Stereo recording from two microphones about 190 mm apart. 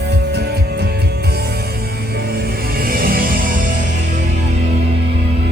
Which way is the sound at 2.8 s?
50° right (ahead or behind).